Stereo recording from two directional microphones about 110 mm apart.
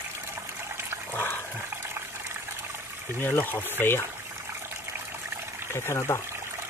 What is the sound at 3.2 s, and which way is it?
Speech, 15° left (ahead or behind).